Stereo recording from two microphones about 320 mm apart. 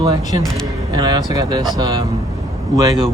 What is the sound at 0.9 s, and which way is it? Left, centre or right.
A man's voice, centre.